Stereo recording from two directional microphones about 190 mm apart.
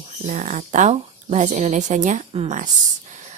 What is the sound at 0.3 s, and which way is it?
Speech, 40° right (ahead or behind).